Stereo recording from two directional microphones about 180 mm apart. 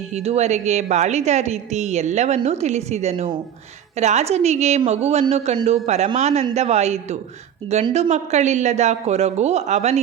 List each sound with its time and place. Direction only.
0.1 s a woman's voice: 35° right (ahead or behind)